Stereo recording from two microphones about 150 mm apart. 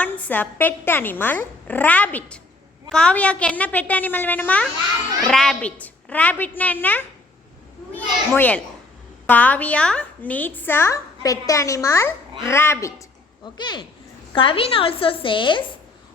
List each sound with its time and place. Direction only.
0.0 s a woman's voice: 10° left (ahead or behind)
8.4 s a woman's voice: 10° left (ahead or behind)
13.4 s a woman's voice: 30° left (ahead or behind)